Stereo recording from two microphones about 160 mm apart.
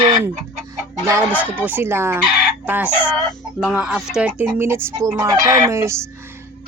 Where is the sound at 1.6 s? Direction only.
15° right (ahead or behind).